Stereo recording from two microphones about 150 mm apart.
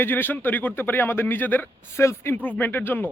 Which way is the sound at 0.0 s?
15° left (ahead or behind).